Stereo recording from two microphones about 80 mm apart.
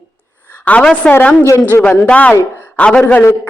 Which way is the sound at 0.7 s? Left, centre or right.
Centre.